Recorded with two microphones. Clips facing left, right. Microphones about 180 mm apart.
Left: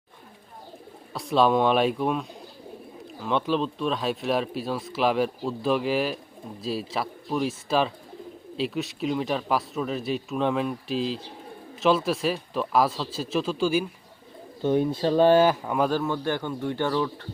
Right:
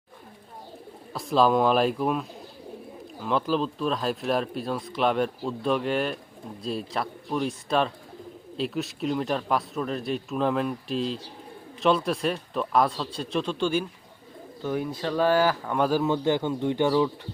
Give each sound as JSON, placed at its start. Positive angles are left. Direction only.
{"t": 1.1, "sound": "speech", "side_deg": 0}
{"t": 14.6, "sound": "speech", "side_deg": 25}
{"t": 15.6, "sound": "speech", "side_deg": 5}
{"t": 15.9, "sound": "speech", "side_deg": -15}